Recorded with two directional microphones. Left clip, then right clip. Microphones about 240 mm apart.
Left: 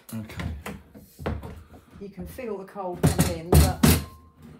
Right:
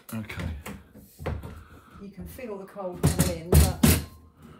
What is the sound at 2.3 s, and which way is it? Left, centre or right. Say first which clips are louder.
Speech: left 3 dB; left.